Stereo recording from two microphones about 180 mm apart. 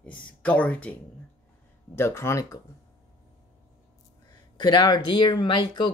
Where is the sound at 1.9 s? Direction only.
15° left (ahead or behind).